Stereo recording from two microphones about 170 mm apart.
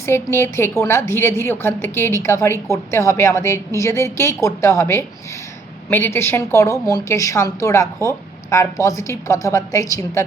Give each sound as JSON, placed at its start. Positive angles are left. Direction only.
{"t": 0.0, "sound": "a woman's voice", "side_deg": 15}